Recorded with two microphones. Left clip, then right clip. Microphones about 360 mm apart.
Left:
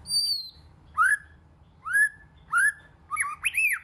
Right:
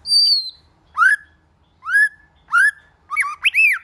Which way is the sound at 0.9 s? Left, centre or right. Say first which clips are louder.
Right 8 dB; centre.